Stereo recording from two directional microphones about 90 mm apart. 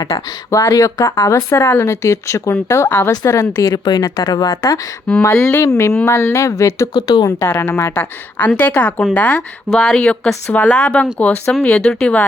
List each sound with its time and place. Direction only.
0.0 s a woman's voice: 35° left (ahead or behind)
6.9 s a woman's voice: 50° left (ahead or behind)
7.3 s a woman's voice: 30° left (ahead or behind); by 12.2 s 15° left (ahead or behind)